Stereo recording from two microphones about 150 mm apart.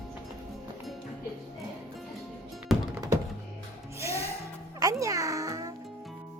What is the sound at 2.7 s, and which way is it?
Music, centre (ahead or behind).